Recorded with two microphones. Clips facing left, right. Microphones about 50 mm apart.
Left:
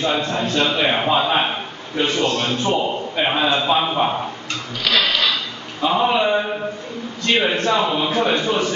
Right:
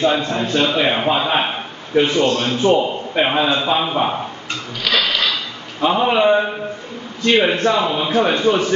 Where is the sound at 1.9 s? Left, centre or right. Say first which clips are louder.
Right 4 dB; right; by 4.1 s centre.